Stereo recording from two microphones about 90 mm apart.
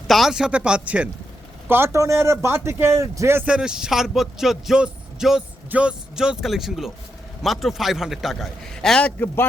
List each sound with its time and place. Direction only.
0.1 s a man's voice: 5° right (ahead or behind)
1.6 s a man's voice: 25° right (ahead or behind)
3.4 s a man's voice: 10° right (ahead or behind); by 9.5 s 25° left (ahead or behind)